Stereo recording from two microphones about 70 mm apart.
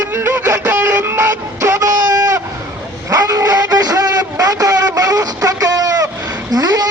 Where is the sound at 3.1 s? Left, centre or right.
Right.